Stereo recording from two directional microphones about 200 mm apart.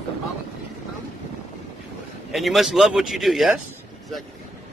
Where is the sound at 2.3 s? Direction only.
Centre (ahead or behind).